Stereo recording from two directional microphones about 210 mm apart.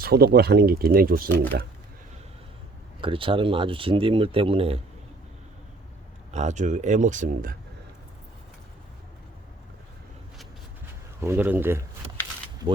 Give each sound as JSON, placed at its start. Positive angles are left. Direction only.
{"t": 0.0, "sound": "speech", "side_deg": -50}
{"t": 3.0, "sound": "speech", "side_deg": -25}
{"t": 6.3, "sound": "speech", "side_deg": -35}
{"t": 11.2, "sound": "speech", "side_deg": -10}